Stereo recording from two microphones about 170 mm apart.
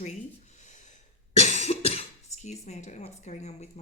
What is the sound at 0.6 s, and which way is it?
Gasp, 45° left (ahead or behind).